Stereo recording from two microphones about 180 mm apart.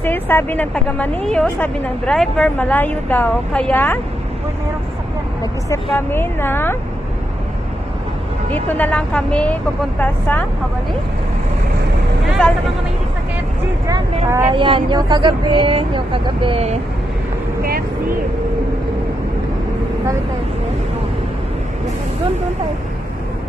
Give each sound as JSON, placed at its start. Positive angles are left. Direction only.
{"t": 0.0, "sound": "a woman's voice", "side_deg": 10}
{"t": 5.4, "sound": "a woman's voice", "side_deg": 15}
{"t": 8.6, "sound": "a woman's voice", "side_deg": 10}
{"t": 12.4, "sound": "a woman's voice", "side_deg": 5}
{"t": 13.8, "sound": "speech", "side_deg": -15}
{"t": 14.5, "sound": "speech", "side_deg": -25}